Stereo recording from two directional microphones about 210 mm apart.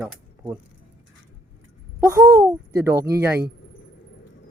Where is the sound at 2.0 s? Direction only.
15° right (ahead or behind).